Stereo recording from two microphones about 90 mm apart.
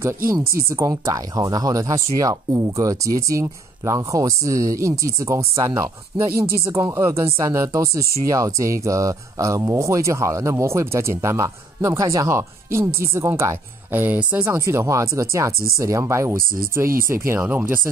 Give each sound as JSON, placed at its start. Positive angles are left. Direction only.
{"t": 0.7, "sound": "speech", "side_deg": -35}
{"t": 14.5, "sound": "speech", "side_deg": -35}